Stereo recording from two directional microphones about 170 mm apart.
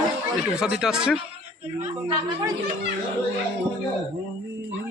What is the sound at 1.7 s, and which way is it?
Speech, 15° right (ahead or behind).